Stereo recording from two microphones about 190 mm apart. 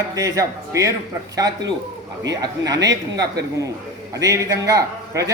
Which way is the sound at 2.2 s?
20° right (ahead or behind).